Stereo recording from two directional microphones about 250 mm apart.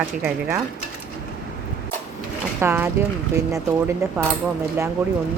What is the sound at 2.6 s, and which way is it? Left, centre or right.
Speech, centre.